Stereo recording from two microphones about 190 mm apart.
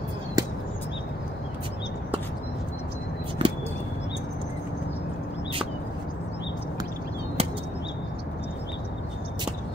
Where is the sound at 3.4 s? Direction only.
25° right (ahead or behind).